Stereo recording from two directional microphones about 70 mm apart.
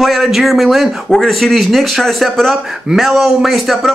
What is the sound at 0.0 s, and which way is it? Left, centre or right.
Speech, centre.